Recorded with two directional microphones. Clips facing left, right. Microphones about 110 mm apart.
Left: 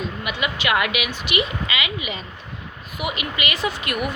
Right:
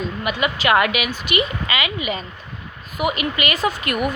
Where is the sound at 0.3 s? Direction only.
40° right (ahead or behind).